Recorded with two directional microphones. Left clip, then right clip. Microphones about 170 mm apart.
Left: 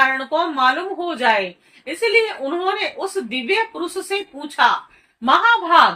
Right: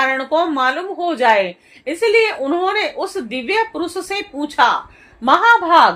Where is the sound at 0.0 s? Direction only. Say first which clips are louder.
Right 1 dB; 45° right (ahead or behind).